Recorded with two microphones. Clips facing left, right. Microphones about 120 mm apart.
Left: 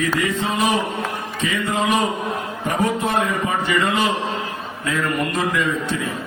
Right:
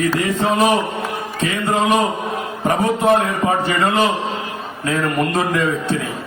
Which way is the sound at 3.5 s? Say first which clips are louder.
Right 3 dB; 40° right (ahead or behind).